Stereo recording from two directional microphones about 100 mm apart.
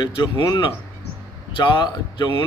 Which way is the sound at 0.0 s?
50° left (ahead or behind).